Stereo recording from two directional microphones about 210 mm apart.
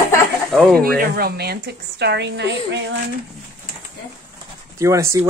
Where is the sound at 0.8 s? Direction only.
45° right (ahead or behind).